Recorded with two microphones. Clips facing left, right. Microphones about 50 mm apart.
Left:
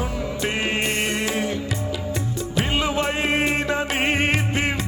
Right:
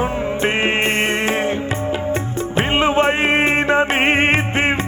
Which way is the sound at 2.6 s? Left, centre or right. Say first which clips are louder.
Right 7 dB; right.